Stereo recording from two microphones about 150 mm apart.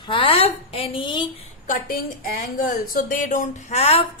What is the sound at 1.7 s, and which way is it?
A woman's voice, 70° left (ahead or behind).